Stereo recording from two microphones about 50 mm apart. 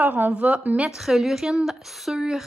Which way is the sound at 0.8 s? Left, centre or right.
Centre.